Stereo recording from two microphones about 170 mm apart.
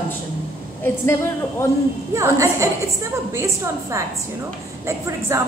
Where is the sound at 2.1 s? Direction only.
15° right (ahead or behind).